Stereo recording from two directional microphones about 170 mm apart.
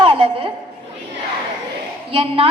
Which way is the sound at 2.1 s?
30° right (ahead or behind).